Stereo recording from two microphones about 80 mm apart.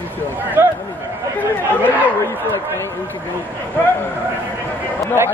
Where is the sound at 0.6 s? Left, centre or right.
Right.